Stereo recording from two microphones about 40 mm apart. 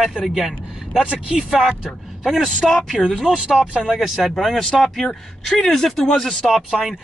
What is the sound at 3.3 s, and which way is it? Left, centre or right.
Speech, right.